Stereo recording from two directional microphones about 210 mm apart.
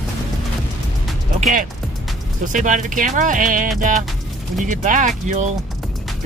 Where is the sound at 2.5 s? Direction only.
35° right (ahead or behind).